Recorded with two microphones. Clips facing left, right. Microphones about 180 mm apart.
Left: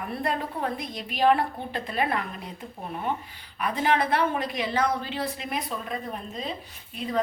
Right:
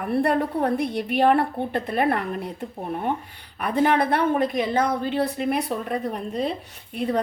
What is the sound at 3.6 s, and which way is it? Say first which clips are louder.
Speech: right 4 dB; 55° right (ahead or behind).